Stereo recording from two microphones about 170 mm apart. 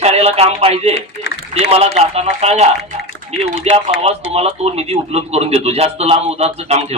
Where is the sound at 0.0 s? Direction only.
35° right (ahead or behind).